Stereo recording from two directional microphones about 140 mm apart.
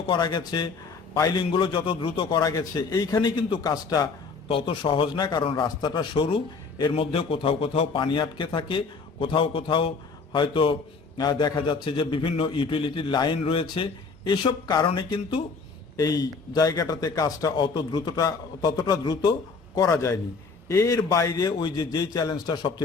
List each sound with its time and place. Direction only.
0.1 s a man's voice: 30° left (ahead or behind)
4.4 s a man's voice: 40° left (ahead or behind)